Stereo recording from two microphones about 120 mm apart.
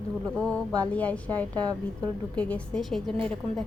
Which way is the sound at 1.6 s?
35° right (ahead or behind).